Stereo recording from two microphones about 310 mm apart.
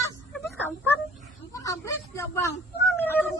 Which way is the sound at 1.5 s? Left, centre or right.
Centre.